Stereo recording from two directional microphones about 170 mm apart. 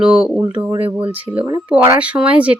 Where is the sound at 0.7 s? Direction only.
30° right (ahead or behind).